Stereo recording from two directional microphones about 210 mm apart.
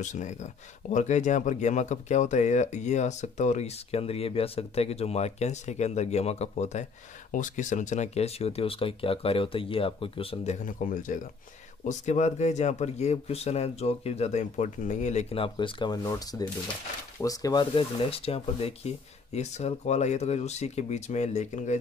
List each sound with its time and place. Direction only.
0.0 s speech: 35° left (ahead or behind)